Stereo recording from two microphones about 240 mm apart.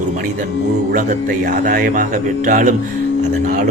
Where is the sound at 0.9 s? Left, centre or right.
Right.